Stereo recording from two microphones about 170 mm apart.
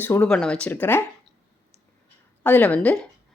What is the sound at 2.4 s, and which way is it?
Speech, 10° left (ahead or behind).